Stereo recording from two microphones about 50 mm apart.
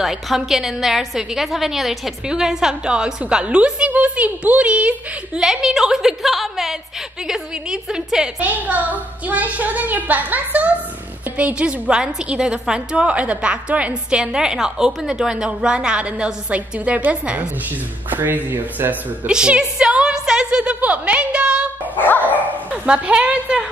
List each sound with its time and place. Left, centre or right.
0.0 s a woman's voice: centre; by 5.4 s right
5.4 s a woman's voice: centre
8.4 s a child's voice: right
17.6 s a child's voice: right
19.2 s a woman's voice: right
21.9 s dog: left
22.9 s a woman's voice: right